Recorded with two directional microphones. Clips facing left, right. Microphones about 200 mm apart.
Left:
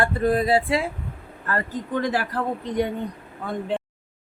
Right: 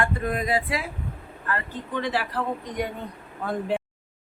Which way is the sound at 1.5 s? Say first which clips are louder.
Left 4 dB; 40° left (ahead or behind).